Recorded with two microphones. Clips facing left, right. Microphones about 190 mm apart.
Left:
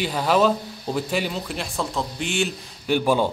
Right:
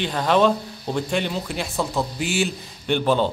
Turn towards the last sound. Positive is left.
turn(degrees=10)  # may be behind; listen again after turning